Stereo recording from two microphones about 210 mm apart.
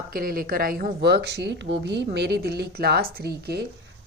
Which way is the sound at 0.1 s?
45° right (ahead or behind).